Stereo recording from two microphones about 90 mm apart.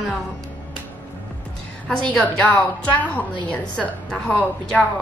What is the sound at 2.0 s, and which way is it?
A woman's voice, 15° left (ahead or behind).